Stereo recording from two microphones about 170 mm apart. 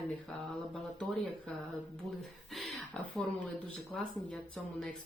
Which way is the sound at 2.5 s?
Centre (ahead or behind).